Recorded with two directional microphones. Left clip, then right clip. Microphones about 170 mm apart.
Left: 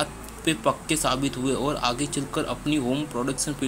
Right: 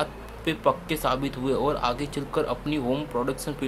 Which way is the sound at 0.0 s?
Centre (ahead or behind).